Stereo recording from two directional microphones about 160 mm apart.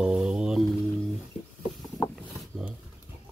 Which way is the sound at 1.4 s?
40° left (ahead or behind).